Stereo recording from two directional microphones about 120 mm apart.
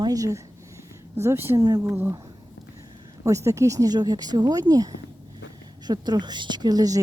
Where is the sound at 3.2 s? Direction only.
25° right (ahead or behind).